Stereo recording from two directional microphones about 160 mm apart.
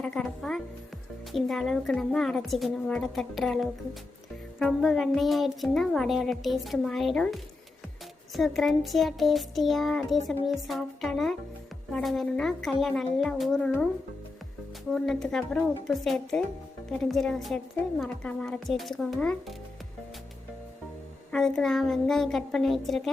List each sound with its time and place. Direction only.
0.0 s child singing: 5° left (ahead or behind)
14.9 s child singing: 5° left (ahead or behind)
21.3 s child singing: 5° left (ahead or behind)